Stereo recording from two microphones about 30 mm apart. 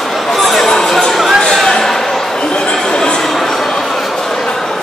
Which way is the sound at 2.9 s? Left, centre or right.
Left.